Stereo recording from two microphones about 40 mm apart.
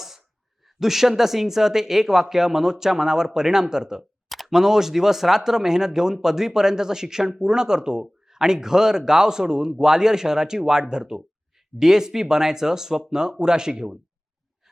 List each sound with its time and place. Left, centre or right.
0.8 s speech: centre